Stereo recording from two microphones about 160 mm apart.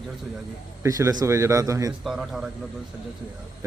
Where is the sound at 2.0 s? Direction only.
Centre (ahead or behind).